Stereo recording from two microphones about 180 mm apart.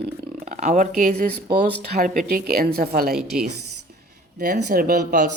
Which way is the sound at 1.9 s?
55° right (ahead or behind).